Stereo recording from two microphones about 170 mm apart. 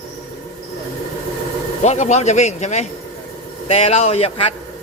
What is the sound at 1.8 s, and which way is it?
Speech, 40° left (ahead or behind).